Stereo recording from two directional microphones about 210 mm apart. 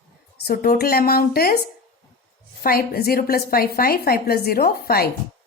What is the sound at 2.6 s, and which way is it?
A woman's voice, 45° left (ahead or behind).